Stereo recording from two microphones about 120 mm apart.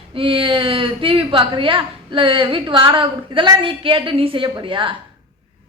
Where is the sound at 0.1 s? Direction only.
50° right (ahead or behind).